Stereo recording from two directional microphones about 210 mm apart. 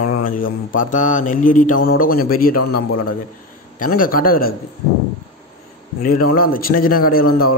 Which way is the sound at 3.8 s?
40° left (ahead or behind).